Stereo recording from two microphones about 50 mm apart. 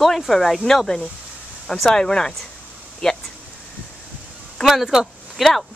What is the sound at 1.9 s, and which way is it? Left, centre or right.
Speech, centre.